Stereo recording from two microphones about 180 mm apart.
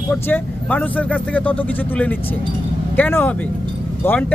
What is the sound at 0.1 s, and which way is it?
Speech, 10° left (ahead or behind).